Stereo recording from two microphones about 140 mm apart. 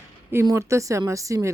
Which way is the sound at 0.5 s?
20° right (ahead or behind).